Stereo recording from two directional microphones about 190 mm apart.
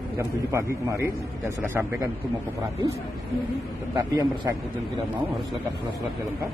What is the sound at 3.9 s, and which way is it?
Speech, 20° right (ahead or behind).